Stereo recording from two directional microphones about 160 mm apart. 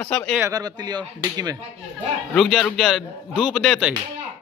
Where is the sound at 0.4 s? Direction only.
20° right (ahead or behind).